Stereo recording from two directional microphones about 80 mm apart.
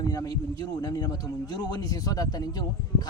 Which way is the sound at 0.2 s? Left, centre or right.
Left.